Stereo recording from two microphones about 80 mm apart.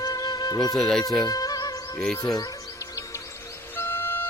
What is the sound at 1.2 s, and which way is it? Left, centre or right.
Music, left.